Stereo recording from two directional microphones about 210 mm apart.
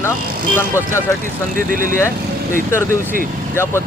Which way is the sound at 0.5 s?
10° left (ahead or behind).